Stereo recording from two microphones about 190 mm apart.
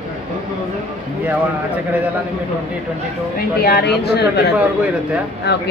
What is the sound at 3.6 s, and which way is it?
Speech, 55° left (ahead or behind).